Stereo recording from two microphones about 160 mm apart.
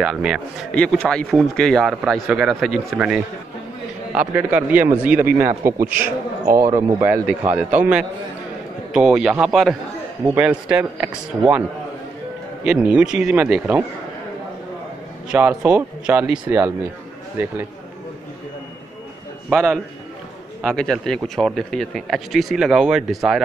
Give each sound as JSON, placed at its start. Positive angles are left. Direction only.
{"t": 0.0, "sound": "a man's voice", "side_deg": -5}
{"t": 6.0, "sound": "speech", "side_deg": -60}
{"t": 6.6, "sound": "a man's voice", "side_deg": -15}
{"t": 8.9, "sound": "a man's voice", "side_deg": -5}
{"t": 12.6, "sound": "a man's voice", "side_deg": -5}
{"t": 15.2, "sound": "a man's voice", "side_deg": -10}
{"t": 20.6, "sound": "a man's voice", "side_deg": 5}